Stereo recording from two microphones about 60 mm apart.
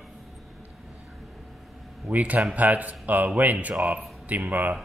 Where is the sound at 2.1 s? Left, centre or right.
Right.